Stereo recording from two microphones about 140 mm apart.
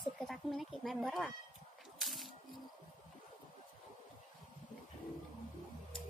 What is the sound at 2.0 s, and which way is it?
Snake, centre (ahead or behind).